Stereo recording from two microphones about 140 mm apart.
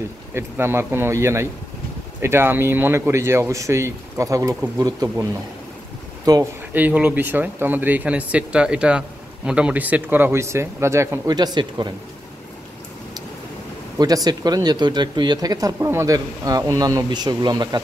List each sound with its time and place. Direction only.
0.3 s speech: 15° right (ahead or behind)
6.3 s speech: 25° right (ahead or behind)
6.7 s speech: 10° right (ahead or behind); by 11.9 s 30° right (ahead or behind)
13.9 s speech: 25° right (ahead or behind)